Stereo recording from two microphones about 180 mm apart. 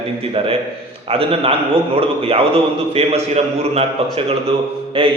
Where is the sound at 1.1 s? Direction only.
30° right (ahead or behind).